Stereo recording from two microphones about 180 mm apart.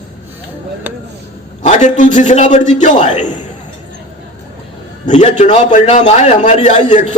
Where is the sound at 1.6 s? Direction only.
40° left (ahead or behind).